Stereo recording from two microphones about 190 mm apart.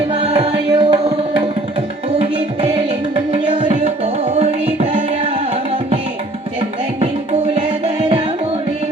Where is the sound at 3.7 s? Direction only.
30° right (ahead or behind).